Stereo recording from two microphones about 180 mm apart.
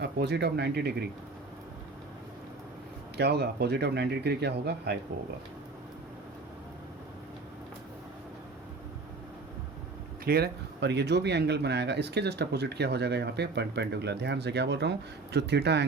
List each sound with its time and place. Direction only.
0.0 s speech: 65° right (ahead or behind)
3.2 s speech: 65° right (ahead or behind)
10.2 s speech: 60° right (ahead or behind)